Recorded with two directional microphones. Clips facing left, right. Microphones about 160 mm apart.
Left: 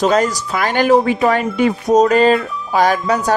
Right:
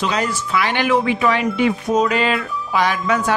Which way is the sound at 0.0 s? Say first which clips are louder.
Left 6 dB; 45° left (ahead or behind).